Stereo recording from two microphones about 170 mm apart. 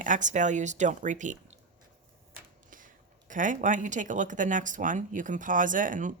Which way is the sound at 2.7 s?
50° right (ahead or behind).